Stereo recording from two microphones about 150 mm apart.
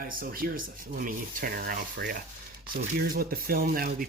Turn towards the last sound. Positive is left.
turn(degrees=-75)  # may be behind; listen again after turning